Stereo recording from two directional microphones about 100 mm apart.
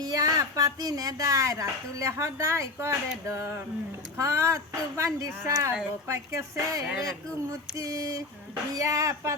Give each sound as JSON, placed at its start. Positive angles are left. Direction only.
{"t": 0.0, "sound": "speech", "side_deg": -35}